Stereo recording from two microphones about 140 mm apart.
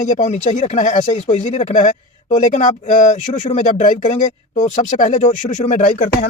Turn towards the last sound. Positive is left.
turn(degrees=70)  # may be behind; listen again after turning